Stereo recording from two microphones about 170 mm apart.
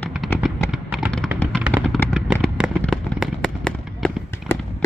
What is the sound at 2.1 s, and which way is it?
Fireworks, 5° right (ahead or behind).